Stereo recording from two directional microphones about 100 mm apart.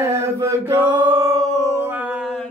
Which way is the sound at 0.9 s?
50° right (ahead or behind).